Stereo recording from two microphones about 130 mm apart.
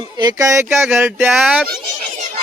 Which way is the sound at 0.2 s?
30° right (ahead or behind).